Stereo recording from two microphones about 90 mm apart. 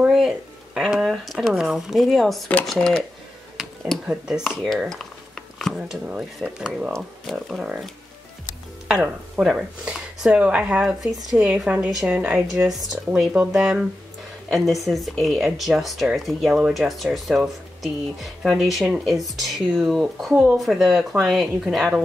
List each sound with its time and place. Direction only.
0.0 s a sound: 5° right (ahead or behind)
0.7 s speech: 5° right (ahead or behind)
4.1 s speech: 5° right (ahead or behind)
4.5 s speech: 5° left (ahead or behind)
4.8 s a sound: 5° left (ahead or behind)
6.0 s speech: 10° right (ahead or behind)
6.9 s speech: centre (ahead or behind)
9.0 s speech: 10° right (ahead or behind)